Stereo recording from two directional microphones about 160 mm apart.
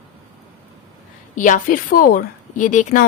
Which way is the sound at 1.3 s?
55° left (ahead or behind).